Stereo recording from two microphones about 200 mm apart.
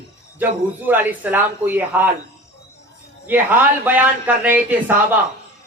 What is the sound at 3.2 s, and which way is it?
Speech, 10° right (ahead or behind).